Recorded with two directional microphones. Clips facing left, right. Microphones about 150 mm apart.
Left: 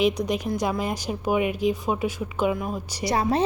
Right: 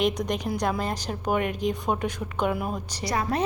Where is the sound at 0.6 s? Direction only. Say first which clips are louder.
Left 1 dB; 10° left (ahead or behind).